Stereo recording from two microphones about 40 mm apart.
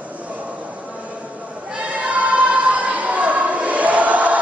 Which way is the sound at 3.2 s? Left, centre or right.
Right.